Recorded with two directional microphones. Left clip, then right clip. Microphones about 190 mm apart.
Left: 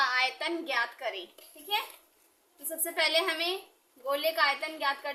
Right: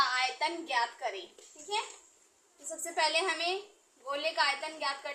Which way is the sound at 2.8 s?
50° left (ahead or behind).